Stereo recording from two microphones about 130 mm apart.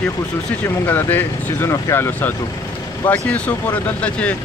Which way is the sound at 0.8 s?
15° left (ahead or behind).